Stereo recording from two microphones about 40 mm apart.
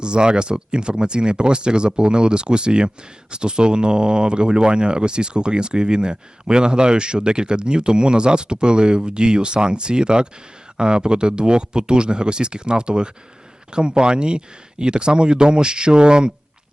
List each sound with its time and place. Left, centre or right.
0.0 s speech: right